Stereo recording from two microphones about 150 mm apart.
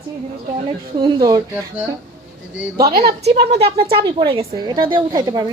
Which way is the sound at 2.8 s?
90° right.